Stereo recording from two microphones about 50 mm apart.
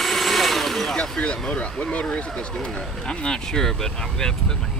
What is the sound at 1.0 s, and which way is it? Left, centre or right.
Speech, centre.